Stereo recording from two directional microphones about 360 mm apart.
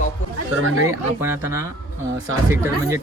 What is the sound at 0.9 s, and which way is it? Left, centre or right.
Speech, centre.